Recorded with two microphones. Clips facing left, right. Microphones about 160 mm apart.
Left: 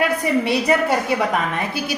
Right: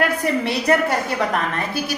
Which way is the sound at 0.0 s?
10° left (ahead or behind).